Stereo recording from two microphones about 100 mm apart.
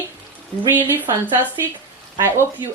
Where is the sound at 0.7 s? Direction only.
20° right (ahead or behind).